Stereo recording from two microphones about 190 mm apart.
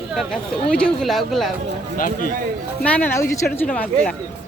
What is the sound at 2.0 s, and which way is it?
Speech, 45° left (ahead or behind).